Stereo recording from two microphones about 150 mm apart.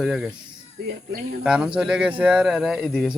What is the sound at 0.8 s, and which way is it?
Speech, 90° right.